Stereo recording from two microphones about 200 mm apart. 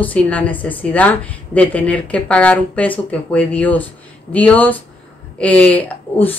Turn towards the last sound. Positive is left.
turn(degrees=10)  # may be behind; listen again after turning